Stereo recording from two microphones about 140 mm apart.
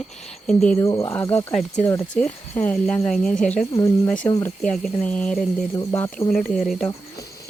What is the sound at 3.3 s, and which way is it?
Speech, 60° left (ahead or behind).